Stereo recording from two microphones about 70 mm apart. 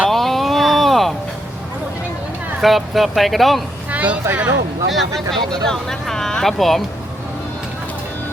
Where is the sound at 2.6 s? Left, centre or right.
Centre.